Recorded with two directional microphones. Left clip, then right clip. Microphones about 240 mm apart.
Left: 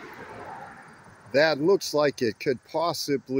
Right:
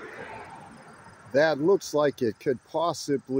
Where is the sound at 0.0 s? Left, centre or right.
Left.